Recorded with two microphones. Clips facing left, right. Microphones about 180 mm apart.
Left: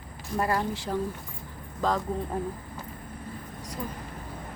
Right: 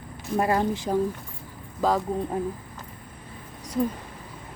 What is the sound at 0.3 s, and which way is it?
Speech, 20° right (ahead or behind).